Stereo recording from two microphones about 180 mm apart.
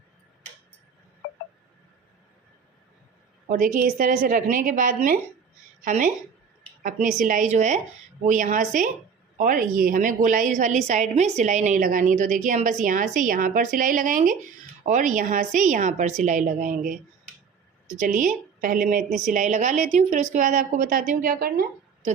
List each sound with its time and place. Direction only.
3.5 s a woman's voice: 50° right (ahead or behind)
7.3 s a woman's voice: 45° right (ahead or behind)